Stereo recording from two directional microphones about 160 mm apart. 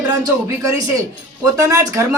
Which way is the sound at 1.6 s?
20° right (ahead or behind).